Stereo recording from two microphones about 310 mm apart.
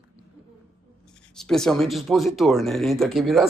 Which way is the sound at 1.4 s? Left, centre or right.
Centre.